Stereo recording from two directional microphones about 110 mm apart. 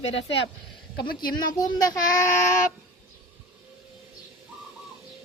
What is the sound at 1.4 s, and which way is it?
Speech, 35° left (ahead or behind).